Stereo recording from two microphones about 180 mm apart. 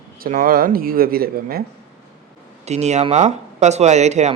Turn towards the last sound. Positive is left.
turn(degrees=-40)  # may be behind; listen again after turning